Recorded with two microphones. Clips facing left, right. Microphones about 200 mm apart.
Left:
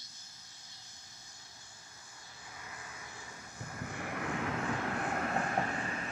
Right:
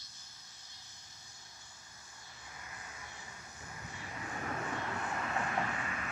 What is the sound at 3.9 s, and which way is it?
Vehicle, 65° left (ahead or behind).